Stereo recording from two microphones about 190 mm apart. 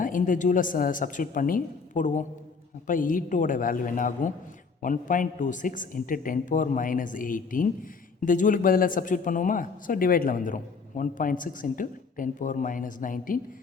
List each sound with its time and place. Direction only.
0.0 s speech: 45° left (ahead or behind)